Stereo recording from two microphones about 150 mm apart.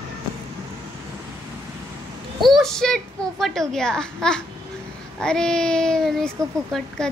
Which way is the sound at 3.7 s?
5° left (ahead or behind).